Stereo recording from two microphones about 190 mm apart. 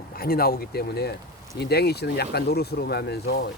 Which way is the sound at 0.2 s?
50° left (ahead or behind).